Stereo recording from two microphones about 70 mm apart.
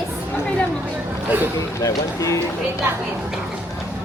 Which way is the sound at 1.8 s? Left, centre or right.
Left.